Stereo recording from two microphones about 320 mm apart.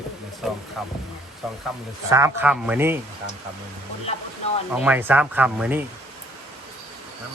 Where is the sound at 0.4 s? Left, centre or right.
Centre.